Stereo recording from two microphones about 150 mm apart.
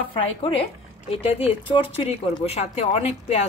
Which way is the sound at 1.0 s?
40° left (ahead or behind).